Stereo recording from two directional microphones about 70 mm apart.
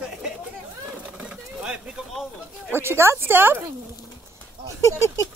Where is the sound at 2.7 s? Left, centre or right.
Right.